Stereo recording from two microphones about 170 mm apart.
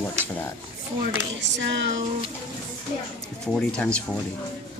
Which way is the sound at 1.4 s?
90° right.